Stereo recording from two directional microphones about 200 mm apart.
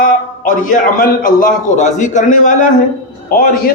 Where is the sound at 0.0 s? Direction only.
40° left (ahead or behind).